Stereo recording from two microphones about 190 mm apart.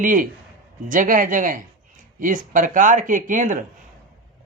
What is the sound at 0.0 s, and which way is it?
Speech, 45° right (ahead or behind).